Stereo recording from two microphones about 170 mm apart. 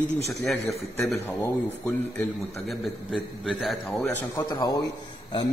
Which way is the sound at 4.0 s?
20° left (ahead or behind).